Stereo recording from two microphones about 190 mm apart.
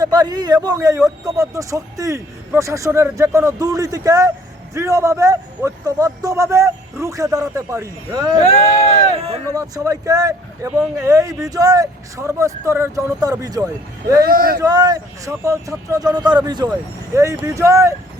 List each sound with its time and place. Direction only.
0.0 s speech: 20° right (ahead or behind)
8.4 s speech: 35° left (ahead or behind)
9.1 s speech: 30° right (ahead or behind)
9.6 s speech: 20° right (ahead or behind)
14.3 s speech: 50° right (ahead or behind)
14.6 s speech: 20° right (ahead or behind)